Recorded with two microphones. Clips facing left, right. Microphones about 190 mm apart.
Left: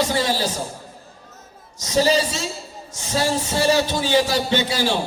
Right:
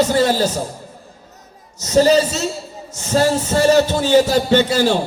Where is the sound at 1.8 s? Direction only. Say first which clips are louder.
Right 6 dB; 45° right (ahead or behind).